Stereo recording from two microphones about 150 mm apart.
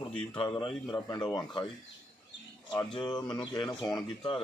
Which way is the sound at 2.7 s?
30° left (ahead or behind).